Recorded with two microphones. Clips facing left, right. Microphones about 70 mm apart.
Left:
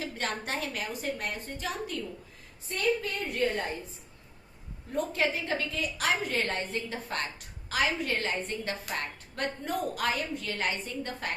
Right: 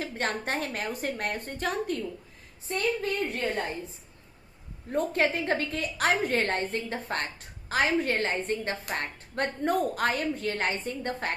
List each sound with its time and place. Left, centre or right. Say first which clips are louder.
0.0 s a woman's voice: right 3 dB; right
2.6 s a woman's voice: right 1 dB; right
4.9 s a woman's voice: right 3 dB; right